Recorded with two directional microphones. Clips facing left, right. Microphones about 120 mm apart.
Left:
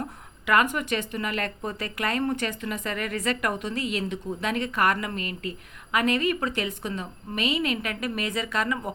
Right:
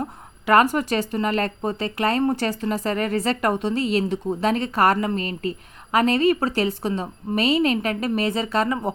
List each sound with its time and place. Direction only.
0.0 s speech: 35° right (ahead or behind)